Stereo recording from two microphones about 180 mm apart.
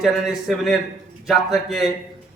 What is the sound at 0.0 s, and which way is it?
A man's voice, centre (ahead or behind).